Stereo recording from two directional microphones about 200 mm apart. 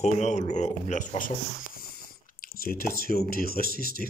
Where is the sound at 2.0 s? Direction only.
45° left (ahead or behind).